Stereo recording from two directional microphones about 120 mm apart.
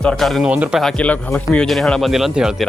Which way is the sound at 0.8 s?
10° left (ahead or behind).